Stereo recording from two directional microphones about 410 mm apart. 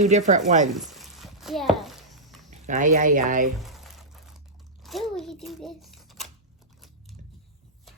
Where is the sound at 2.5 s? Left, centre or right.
Centre.